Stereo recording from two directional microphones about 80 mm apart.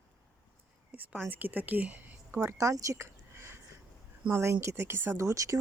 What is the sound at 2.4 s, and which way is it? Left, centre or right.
Speech, right.